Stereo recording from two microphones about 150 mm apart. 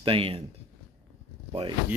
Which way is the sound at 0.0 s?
40° right (ahead or behind).